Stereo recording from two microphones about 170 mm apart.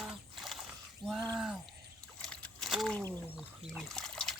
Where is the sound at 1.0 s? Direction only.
30° right (ahead or behind).